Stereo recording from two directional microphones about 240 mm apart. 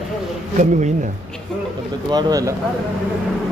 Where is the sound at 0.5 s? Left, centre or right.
Right.